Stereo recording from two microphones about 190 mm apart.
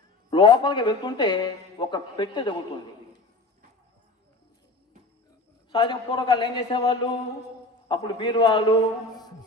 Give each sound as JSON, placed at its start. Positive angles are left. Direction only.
{"t": 0.3, "sound": "speech", "side_deg": 25}
{"t": 5.7, "sound": "speech", "side_deg": 25}